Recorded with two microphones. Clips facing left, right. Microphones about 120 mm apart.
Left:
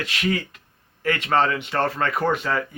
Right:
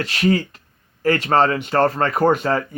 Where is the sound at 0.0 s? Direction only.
35° right (ahead or behind).